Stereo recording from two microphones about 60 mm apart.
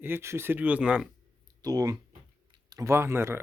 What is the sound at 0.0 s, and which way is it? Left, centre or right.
Speech, right.